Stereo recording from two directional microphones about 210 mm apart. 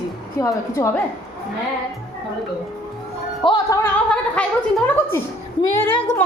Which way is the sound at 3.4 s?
20° left (ahead or behind).